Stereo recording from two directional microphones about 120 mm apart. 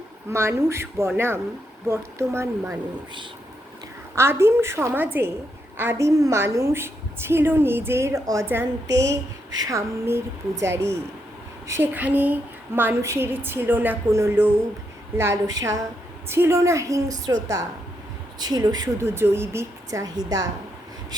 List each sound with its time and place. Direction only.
0.3 s a woman's voice: 20° right (ahead or behind)
4.1 s a woman's voice: 20° right (ahead or behind)
18.3 s speech: 35° right (ahead or behind)
19.0 s a woman's voice: 20° right (ahead or behind)